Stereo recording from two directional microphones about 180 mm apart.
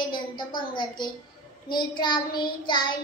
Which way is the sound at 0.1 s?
25° left (ahead or behind).